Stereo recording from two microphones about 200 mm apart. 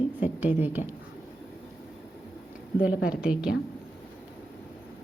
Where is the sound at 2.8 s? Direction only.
5° right (ahead or behind).